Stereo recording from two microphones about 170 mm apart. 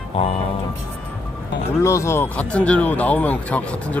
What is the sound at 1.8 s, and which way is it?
Speech, 15° left (ahead or behind).